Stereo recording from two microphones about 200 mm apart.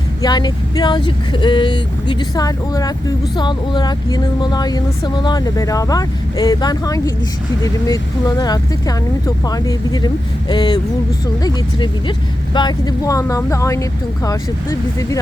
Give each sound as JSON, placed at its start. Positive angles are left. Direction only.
{"t": 0.2, "sound": "speech", "side_deg": 20}
{"t": 8.4, "sound": "speech", "side_deg": 20}